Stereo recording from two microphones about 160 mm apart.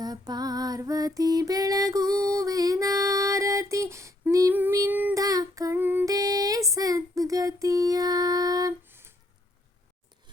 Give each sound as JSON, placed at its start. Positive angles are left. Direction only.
{"t": 0.0, "sound": "music", "side_deg": -25}
{"t": 4.3, "sound": "female singing", "side_deg": -20}
{"t": 5.2, "sound": "female singing", "side_deg": -20}
{"t": 6.1, "sound": "a sound", "side_deg": -20}